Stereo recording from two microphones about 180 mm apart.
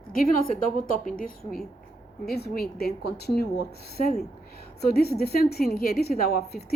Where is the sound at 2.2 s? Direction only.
65° left (ahead or behind).